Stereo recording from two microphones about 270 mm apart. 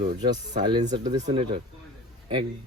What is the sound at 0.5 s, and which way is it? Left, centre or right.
Speech, centre.